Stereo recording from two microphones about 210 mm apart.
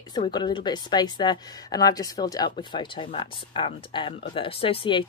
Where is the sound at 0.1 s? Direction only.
20° left (ahead or behind).